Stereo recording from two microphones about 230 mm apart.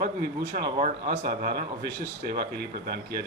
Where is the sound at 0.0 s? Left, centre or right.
Right.